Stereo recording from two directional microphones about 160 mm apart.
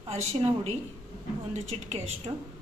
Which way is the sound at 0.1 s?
40° right (ahead or behind).